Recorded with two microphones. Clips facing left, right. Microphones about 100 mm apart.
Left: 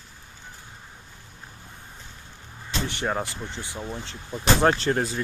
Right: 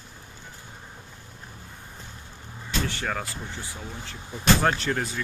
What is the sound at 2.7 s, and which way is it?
Speech, 20° left (ahead or behind).